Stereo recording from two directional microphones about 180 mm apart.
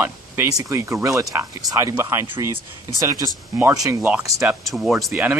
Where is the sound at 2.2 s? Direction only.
25° right (ahead or behind).